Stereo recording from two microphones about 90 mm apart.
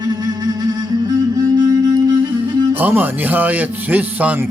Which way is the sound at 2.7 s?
20° right (ahead or behind).